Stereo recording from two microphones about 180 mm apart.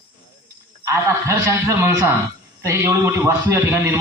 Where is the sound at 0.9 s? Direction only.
15° right (ahead or behind).